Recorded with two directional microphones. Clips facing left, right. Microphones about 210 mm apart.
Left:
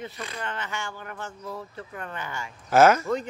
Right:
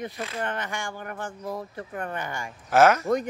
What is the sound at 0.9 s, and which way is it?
Speech, 50° right (ahead or behind).